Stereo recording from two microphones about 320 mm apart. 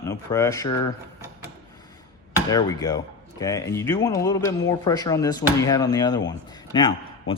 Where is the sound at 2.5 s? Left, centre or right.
Centre.